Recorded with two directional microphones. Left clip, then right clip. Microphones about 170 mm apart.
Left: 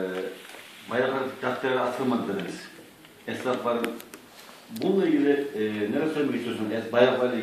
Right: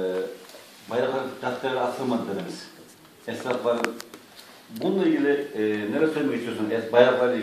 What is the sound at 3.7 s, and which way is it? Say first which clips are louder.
Speech: right 4 dB; 55° right (ahead or behind).